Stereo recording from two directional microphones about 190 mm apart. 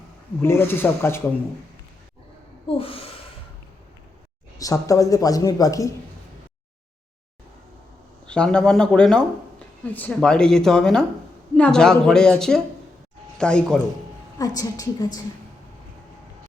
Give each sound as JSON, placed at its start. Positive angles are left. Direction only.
{"t": 0.4, "sound": "speech", "side_deg": 10}
{"t": 2.6, "sound": "a woman's voice", "side_deg": 30}
{"t": 4.5, "sound": "speech", "side_deg": 15}
{"t": 8.3, "sound": "speech", "side_deg": 5}
{"t": 14.3, "sound": "a woman's voice", "side_deg": 20}